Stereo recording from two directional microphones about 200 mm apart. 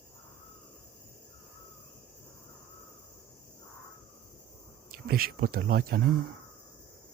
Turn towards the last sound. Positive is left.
turn(degrees=-50)  # may be behind; listen again after turning